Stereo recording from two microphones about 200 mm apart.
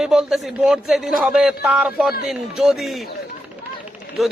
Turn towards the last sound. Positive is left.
turn(degrees=0)  # may be behind; listen again after turning